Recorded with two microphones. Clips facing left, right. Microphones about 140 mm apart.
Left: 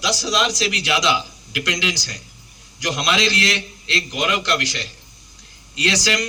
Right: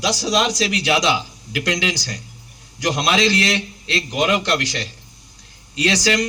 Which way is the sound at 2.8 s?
30° right (ahead or behind).